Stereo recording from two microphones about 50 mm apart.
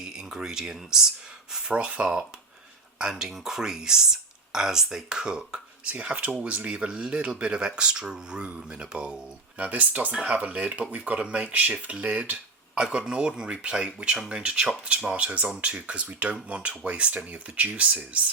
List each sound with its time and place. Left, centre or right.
0.0 s speech: centre
1.7 s speech: right
9.6 s speech: right